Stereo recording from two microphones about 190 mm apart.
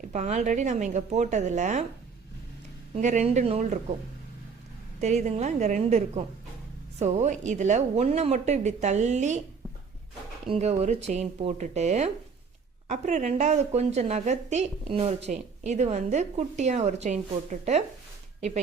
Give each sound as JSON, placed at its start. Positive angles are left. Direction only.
{"t": 0.1, "sound": "a woman's voice", "side_deg": -40}
{"t": 2.9, "sound": "a woman's voice", "side_deg": -40}
{"t": 4.9, "sound": "a woman's voice", "side_deg": -40}
{"t": 10.4, "sound": "a woman's voice", "side_deg": -30}